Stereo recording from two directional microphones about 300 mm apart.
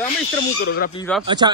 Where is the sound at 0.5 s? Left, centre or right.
Left.